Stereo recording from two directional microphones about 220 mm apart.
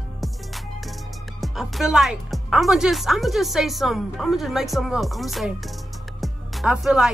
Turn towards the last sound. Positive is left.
turn(degrees=-5)  # may be behind; listen again after turning